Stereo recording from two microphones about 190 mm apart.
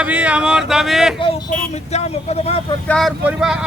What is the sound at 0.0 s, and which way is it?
Speech, 5° right (ahead or behind).